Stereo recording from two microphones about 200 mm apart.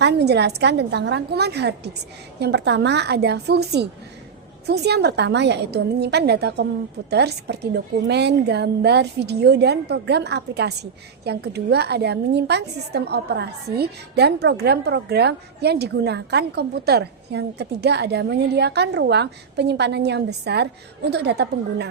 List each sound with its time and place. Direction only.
0.0 s a woman's voice: 55° right (ahead or behind)